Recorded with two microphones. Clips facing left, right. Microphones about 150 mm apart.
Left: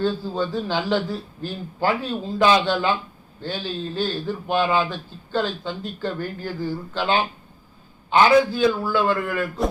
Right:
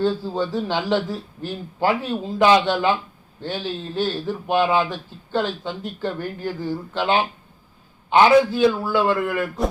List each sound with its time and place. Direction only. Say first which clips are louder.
0.0 s speech: right 2 dB; 20° right (ahead or behind)